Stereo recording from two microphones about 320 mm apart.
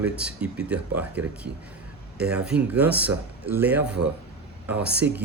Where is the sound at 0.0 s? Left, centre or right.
Centre.